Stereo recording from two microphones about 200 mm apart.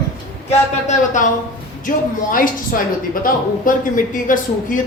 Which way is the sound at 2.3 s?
45° left (ahead or behind).